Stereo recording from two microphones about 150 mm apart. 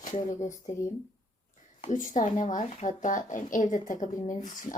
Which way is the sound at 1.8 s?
60° left (ahead or behind).